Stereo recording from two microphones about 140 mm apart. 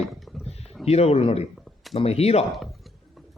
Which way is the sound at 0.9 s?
45° left (ahead or behind).